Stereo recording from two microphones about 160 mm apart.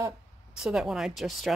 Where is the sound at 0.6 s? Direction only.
5° right (ahead or behind).